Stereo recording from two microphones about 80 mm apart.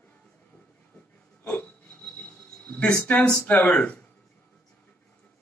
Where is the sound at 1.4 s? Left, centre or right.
Left.